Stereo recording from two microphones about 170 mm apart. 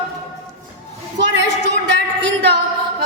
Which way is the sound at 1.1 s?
90° right.